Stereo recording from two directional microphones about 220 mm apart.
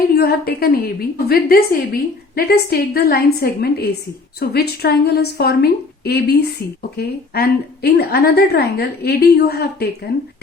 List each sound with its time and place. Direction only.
0.1 s a woman's voice: 45° left (ahead or behind)